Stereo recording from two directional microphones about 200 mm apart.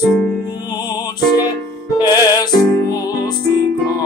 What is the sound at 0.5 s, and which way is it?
Music, 20° left (ahead or behind).